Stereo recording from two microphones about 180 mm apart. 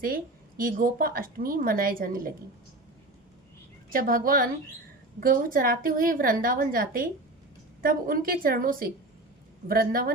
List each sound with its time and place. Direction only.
0.0 s a woman's voice: 55° right (ahead or behind)
3.9 s a woman's voice: 50° right (ahead or behind)